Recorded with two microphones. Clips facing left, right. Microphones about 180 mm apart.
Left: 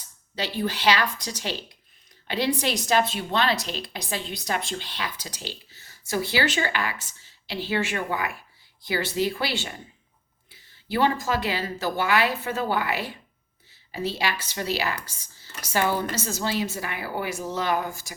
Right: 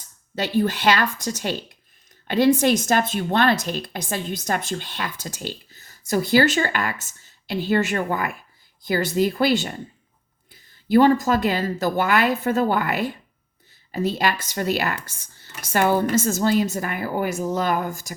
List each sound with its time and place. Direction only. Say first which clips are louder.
0.3 s a woman's voice: right 6 dB; 50° right (ahead or behind)